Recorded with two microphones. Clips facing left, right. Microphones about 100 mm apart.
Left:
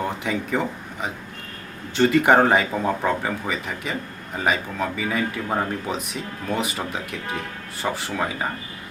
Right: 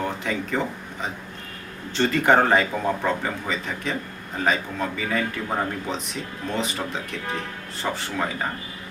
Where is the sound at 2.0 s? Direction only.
15° left (ahead or behind).